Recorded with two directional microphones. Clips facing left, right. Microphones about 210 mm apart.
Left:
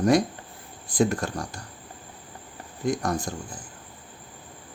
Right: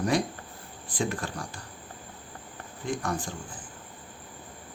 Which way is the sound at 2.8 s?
40° left (ahead or behind).